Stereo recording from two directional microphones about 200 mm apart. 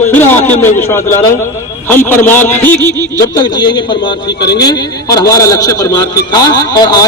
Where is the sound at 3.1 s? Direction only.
20° left (ahead or behind).